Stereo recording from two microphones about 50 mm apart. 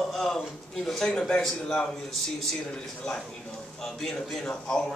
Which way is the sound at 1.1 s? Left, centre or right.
Centre.